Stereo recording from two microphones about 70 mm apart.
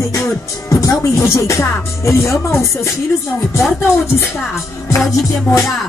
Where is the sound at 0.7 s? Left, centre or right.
Left.